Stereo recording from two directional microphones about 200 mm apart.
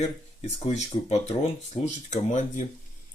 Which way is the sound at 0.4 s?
35° left (ahead or behind).